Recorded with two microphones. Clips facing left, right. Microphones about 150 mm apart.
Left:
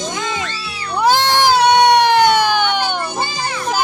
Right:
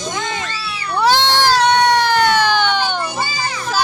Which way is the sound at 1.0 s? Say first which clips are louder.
Left 1 dB; 10° left (ahead or behind).